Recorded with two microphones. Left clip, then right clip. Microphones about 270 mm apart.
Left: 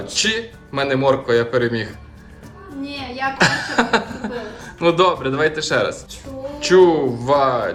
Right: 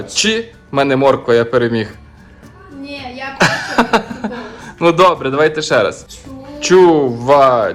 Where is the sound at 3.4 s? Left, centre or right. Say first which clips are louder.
Right 5 dB; centre.